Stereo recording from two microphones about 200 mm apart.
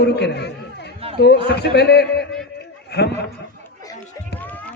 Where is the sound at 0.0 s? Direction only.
55° left (ahead or behind).